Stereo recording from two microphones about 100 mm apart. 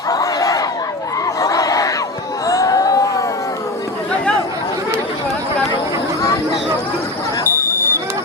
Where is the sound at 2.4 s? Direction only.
35° left (ahead or behind).